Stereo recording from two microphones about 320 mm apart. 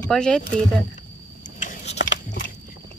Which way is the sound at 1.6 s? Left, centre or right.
Left.